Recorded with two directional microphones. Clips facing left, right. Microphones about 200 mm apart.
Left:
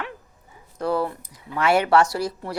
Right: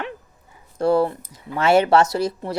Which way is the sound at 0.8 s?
30° right (ahead or behind).